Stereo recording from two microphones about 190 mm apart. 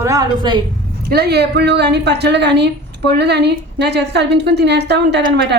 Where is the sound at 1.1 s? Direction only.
60° right (ahead or behind).